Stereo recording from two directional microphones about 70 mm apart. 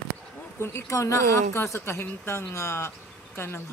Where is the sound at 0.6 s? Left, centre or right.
Left.